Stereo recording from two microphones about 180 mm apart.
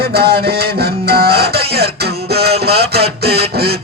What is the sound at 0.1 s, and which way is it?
Music, 60° right (ahead or behind).